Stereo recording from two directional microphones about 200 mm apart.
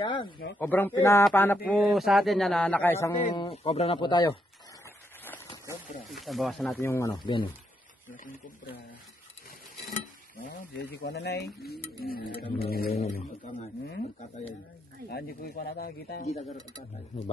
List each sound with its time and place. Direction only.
0.0 s speech: 25° left (ahead or behind)
0.6 s speech: 10° left (ahead or behind)
1.7 s a man's voice: centre (ahead or behind)
3.1 s speech: 25° left (ahead or behind)
6.1 s a man's voice: centre (ahead or behind)
6.8 s speech: 15° left (ahead or behind)
10.4 s speech: 55° left (ahead or behind)
15.0 s speech: 50° left (ahead or behind)